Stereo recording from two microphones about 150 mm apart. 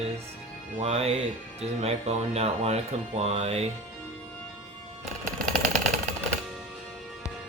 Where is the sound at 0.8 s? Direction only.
45° right (ahead or behind).